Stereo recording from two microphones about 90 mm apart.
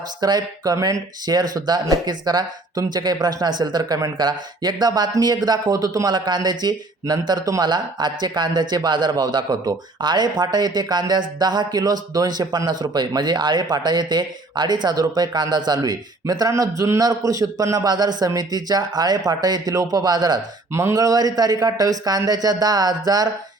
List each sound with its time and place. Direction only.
0.2 s a man's voice: 50° right (ahead or behind)